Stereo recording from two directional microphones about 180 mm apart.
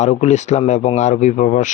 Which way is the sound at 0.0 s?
40° left (ahead or behind).